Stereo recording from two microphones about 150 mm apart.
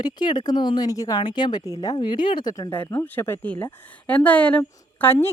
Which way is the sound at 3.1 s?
15° left (ahead or behind).